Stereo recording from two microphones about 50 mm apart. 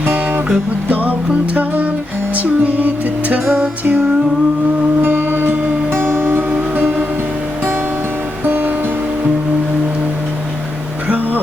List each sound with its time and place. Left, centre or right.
1.5 s music: right
5.0 s music: right
8.4 s music: right